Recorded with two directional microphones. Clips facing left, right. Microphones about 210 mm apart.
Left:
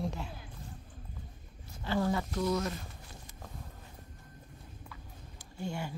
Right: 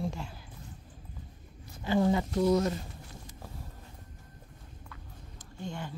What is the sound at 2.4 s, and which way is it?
Speech, 30° right (ahead or behind).